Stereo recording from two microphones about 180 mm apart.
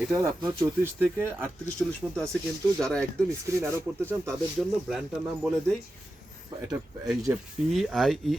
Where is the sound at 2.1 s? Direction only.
5° left (ahead or behind).